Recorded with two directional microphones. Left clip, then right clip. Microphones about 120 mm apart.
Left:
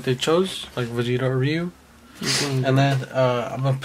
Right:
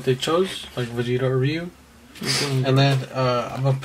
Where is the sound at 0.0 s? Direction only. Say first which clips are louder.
Even; 40° left (ahead or behind).